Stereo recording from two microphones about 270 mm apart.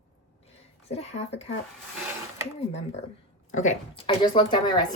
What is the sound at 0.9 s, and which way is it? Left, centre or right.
Speech, left.